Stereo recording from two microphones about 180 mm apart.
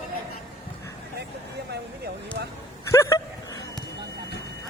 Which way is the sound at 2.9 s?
15° left (ahead or behind).